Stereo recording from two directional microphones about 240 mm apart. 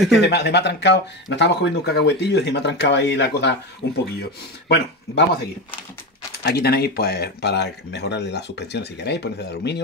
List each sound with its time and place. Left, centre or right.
0.2 s speech: left
6.4 s speech: left